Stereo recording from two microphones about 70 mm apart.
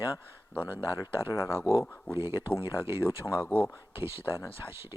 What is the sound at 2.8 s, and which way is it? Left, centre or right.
Speech, right.